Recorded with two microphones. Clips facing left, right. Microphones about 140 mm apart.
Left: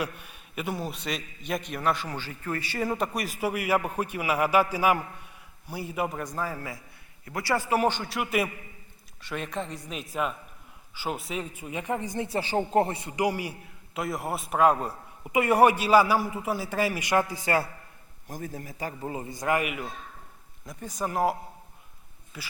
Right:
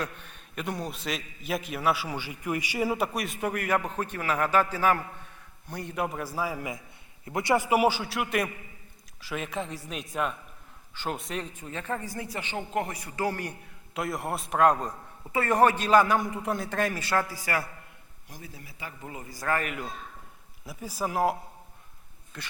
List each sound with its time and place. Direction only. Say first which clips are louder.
0.0 s a man's voice: left 2 dB; 10° left (ahead or behind); by 17.7 s 25° left (ahead or behind)
18.3 s speech: left 9 dB; 45° left (ahead or behind)
19.1 s speech: left 2 dB; 25° left (ahead or behind); by 19.9 s 5° left (ahead or behind)
20.7 s a man's voice: even; 5° right (ahead or behind)
22.3 s a man's voice: even; 5° left (ahead or behind)